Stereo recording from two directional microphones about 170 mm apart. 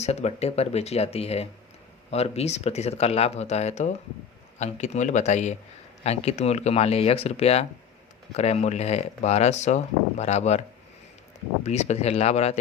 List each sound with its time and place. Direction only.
0.0 s speech: 40° left (ahead or behind)
11.6 s speech: 40° left (ahead or behind)